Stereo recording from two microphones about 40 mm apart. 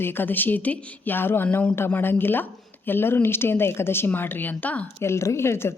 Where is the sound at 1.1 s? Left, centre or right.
Left.